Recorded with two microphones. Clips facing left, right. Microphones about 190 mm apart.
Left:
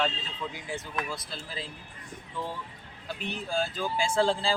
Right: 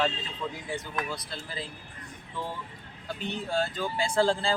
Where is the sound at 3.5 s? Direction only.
Centre (ahead or behind).